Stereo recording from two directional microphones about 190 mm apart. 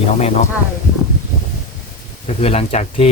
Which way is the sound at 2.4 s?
35° left (ahead or behind).